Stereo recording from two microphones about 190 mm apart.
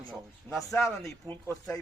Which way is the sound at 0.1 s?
Centre (ahead or behind).